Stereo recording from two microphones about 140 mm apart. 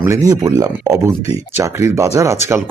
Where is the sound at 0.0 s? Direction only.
20° right (ahead or behind).